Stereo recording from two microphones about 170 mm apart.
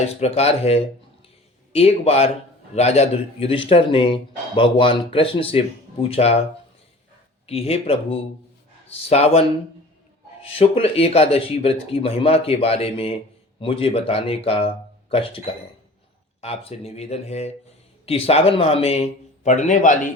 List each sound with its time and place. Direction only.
0.2 s speech: 40° left (ahead or behind)
7.4 s speech: 35° left (ahead or behind)
10.4 s speech: 35° left (ahead or behind)